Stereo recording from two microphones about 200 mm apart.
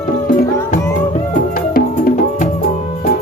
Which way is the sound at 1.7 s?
45° left (ahead or behind).